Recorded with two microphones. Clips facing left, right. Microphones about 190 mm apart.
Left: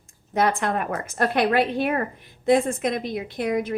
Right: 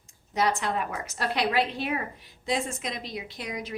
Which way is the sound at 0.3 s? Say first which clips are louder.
Left 4 dB; 55° left (ahead or behind).